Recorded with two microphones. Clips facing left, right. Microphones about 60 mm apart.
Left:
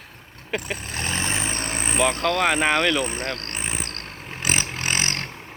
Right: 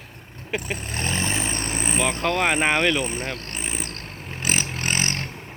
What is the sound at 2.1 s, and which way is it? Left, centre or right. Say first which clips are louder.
Speech: right 1 dB; centre.